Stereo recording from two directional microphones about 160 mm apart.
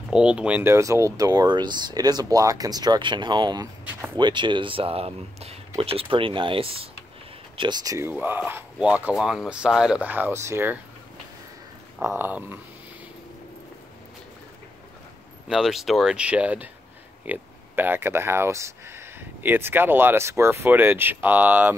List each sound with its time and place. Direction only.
0.1 s speech: 5° right (ahead or behind)
12.0 s speech: 15° right (ahead or behind)
15.4 s speech: 5° right (ahead or behind)